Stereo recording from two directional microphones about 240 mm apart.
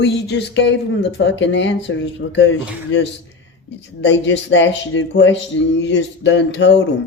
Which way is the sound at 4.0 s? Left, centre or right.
Left.